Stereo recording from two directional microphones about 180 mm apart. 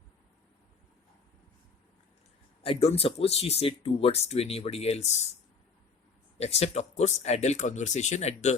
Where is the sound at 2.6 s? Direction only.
35° left (ahead or behind).